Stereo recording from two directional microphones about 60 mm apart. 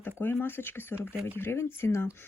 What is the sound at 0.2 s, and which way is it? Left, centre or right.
Speech, left.